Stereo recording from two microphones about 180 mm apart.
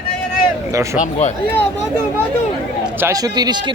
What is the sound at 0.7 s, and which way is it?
Speech, 15° right (ahead or behind).